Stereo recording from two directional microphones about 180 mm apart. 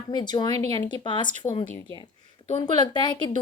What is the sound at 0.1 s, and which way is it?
A woman's voice, 25° left (ahead or behind).